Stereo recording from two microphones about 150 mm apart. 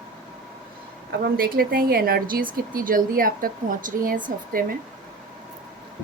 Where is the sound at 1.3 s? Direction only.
80° right.